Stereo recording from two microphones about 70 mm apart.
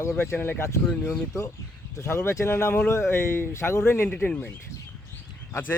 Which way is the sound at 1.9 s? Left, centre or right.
Left.